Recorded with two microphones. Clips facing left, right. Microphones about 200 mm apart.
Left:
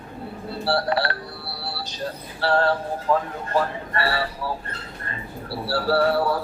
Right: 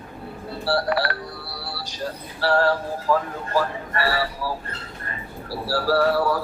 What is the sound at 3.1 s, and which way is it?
Speech, 25° left (ahead or behind).